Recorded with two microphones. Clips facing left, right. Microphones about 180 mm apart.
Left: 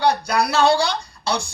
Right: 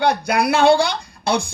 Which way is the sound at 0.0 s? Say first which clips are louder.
Right 1 dB; 55° right (ahead or behind).